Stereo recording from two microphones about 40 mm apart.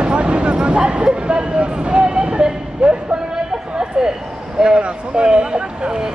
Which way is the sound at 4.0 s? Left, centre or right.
Centre.